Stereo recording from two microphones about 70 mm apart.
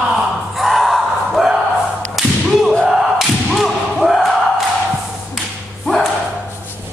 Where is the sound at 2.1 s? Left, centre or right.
Centre.